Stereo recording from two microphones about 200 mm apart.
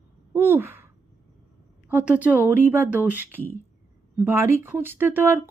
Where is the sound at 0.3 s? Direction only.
10° right (ahead or behind).